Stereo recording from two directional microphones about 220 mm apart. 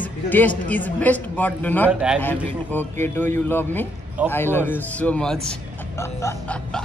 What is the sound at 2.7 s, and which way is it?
Speech, 10° left (ahead or behind).